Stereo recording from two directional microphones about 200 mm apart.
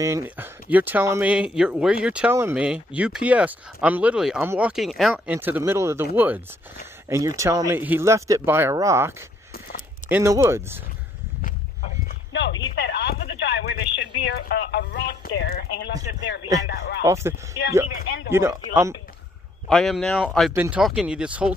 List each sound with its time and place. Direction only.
0.0 s speech: 10° right (ahead or behind)
11.4 s a sound: 40° left (ahead or behind)
12.3 s a sound: 65° left (ahead or behind)
12.8 s speech: 55° left (ahead or behind)
17.0 s speech: 15° right (ahead or behind)
17.9 s speech: 60° left (ahead or behind)
18.3 s speech: 15° right (ahead or behind)
19.7 s speech: centre (ahead or behind)